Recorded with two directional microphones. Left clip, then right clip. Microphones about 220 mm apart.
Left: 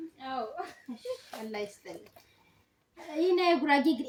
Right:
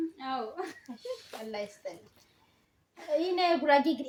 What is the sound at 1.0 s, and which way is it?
Speech, 20° right (ahead or behind).